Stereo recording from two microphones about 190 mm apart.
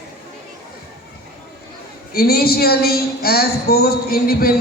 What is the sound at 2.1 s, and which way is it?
A woman's voice, 55° left (ahead or behind).